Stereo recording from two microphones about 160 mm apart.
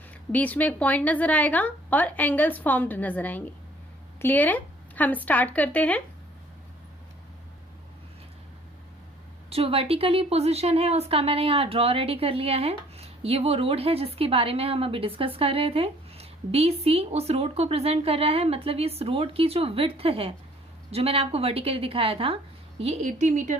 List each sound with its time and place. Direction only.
0.3 s a woman's voice: 10° left (ahead or behind)
9.5 s a woman's voice: 35° right (ahead or behind)